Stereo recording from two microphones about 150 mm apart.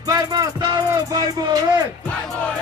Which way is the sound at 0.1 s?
25° right (ahead or behind).